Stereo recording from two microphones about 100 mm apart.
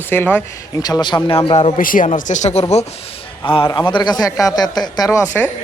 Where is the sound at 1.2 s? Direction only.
60° left (ahead or behind); by 2.6 s 80° left.